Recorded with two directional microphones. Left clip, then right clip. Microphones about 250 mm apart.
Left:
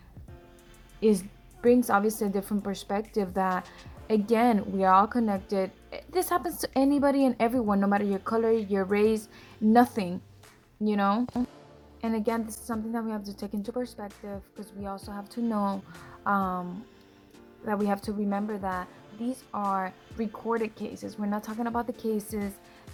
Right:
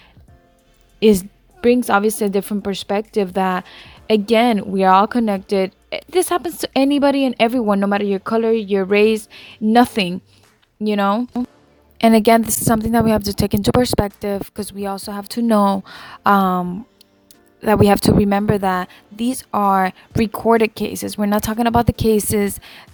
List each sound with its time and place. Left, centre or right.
0.9 s a woman's voice: right
11.9 s a woman's voice: right
17.8 s a woman's voice: right